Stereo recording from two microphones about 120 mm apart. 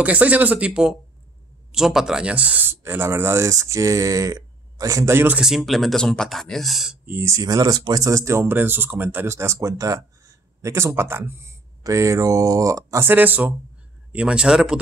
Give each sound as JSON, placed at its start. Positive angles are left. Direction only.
{"t": 0.0, "sound": "speech", "side_deg": -10}
{"t": 5.4, "sound": "speech", "side_deg": 0}
{"t": 7.1, "sound": "speech", "side_deg": -20}